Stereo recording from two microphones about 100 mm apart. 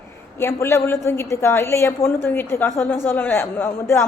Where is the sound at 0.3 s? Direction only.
25° left (ahead or behind).